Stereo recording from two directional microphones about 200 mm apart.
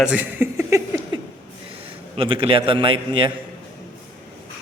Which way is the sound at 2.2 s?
25° right (ahead or behind).